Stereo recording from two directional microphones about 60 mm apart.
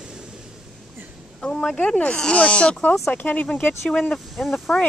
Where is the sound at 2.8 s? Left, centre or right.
Left.